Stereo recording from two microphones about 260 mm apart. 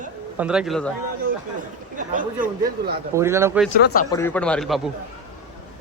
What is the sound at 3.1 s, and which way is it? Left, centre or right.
Speech, centre.